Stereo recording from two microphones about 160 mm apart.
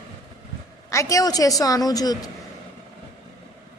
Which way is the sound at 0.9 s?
20° left (ahead or behind).